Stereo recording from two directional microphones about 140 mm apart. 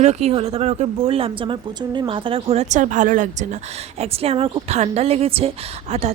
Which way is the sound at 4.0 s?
45° right (ahead or behind).